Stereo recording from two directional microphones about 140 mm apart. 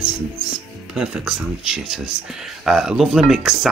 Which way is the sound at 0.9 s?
5° right (ahead or behind).